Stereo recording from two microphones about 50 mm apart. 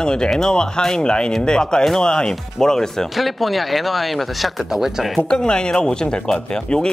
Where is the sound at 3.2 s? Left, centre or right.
Centre.